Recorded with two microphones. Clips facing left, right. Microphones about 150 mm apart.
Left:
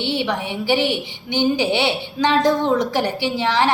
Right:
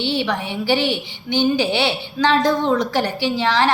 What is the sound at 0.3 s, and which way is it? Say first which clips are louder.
A woman's voice: even; 20° left (ahead or behind).